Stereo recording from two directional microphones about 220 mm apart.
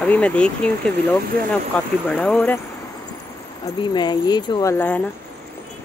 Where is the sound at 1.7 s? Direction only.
5° left (ahead or behind).